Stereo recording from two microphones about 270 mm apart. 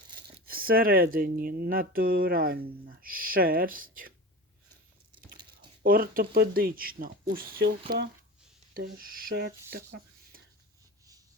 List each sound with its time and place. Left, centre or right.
0.4 s speech: right
5.8 s speech: right